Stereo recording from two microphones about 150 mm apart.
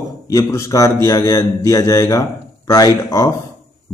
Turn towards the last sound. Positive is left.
turn(degrees=25)  # may be behind; listen again after turning